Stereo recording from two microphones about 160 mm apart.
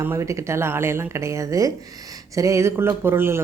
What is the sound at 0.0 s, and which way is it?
Speech, 15° right (ahead or behind).